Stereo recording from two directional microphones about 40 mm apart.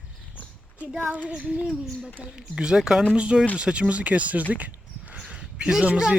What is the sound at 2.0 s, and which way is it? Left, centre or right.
Speech, right.